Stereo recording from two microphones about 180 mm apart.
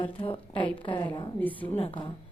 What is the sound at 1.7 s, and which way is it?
Speech, 30° left (ahead or behind).